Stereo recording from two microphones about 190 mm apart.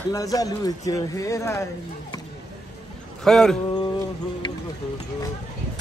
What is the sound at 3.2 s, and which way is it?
Speech, 5° left (ahead or behind).